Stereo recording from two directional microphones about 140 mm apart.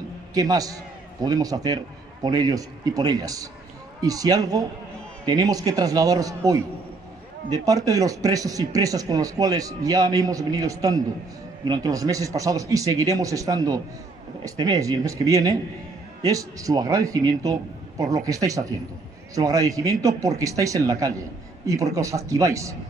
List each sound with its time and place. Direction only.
0.3 s speech: 25° right (ahead or behind)